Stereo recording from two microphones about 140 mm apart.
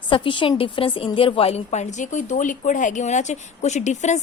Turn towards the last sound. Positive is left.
turn(degrees=55)  # may be behind; listen again after turning